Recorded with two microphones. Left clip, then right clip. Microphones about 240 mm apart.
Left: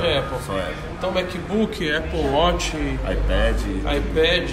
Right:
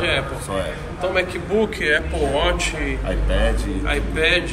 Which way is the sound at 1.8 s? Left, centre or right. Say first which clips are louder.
Right 3 dB; centre.